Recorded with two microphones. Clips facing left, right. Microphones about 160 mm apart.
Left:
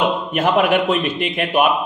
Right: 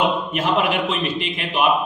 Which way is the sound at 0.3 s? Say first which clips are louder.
Left 7 dB; 60° left (ahead or behind).